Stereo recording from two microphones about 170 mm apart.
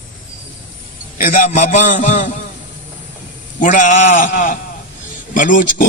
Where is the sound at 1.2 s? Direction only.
50° left (ahead or behind).